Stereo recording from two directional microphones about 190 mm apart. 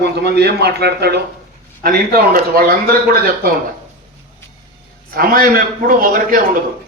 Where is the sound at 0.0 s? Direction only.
60° right (ahead or behind).